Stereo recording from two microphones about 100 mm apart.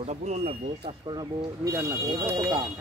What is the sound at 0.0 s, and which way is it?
Speech, 90° right.